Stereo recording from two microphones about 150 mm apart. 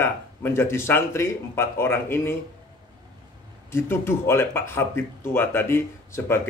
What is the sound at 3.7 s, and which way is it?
Speech, 15° left (ahead or behind).